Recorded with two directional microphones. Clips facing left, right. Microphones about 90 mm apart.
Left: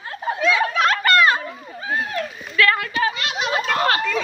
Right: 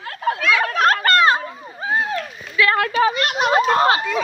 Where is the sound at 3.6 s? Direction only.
30° right (ahead or behind).